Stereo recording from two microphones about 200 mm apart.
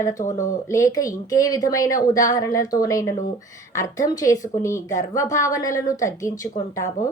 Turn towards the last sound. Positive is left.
turn(degrees=15)  # may be behind; listen again after turning